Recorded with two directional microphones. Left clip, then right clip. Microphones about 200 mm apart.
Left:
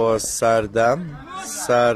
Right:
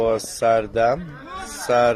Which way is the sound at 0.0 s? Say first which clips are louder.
Left 1 dB; 20° left (ahead or behind).